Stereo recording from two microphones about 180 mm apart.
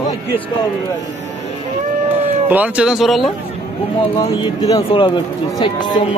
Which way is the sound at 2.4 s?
10° right (ahead or behind).